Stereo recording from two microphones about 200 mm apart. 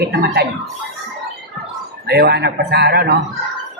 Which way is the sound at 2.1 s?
55° right (ahead or behind).